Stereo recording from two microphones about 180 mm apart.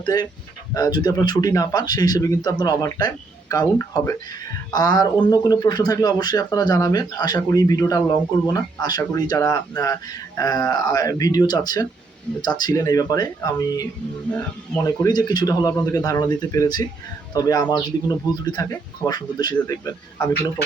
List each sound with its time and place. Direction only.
0.0 s a man's voice: 20° left (ahead or behind)
14.8 s a man's voice: 20° left (ahead or behind)